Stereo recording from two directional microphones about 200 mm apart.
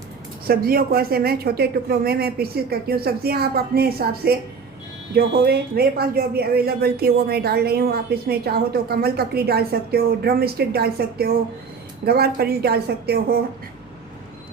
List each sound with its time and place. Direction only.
0.4 s speech: 50° right (ahead or behind)